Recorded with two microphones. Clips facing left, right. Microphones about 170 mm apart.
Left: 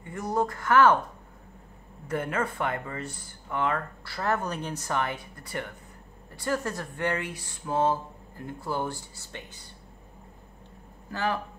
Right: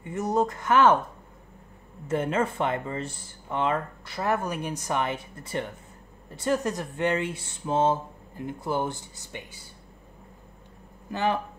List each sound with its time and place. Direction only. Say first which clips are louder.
0.0 s speech: right 3 dB; 20° right (ahead or behind)
2.0 s speech: right 4 dB; 25° right (ahead or behind)
11.1 s speech: right 3 dB; 20° right (ahead or behind)